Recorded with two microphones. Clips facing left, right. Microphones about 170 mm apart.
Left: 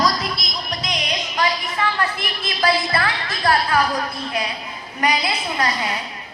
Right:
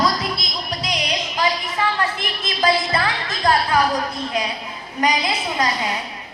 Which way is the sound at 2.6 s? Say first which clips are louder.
Right 1 dB; 20° right (ahead or behind).